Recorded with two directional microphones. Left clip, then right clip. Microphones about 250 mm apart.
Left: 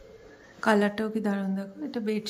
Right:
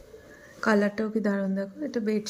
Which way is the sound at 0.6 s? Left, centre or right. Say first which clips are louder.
Even; centre.